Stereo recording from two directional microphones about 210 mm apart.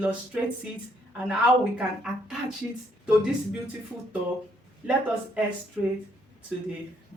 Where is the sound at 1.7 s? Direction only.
5° right (ahead or behind).